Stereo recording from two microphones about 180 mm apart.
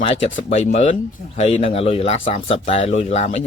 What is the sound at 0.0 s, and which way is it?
Speech, 35° left (ahead or behind).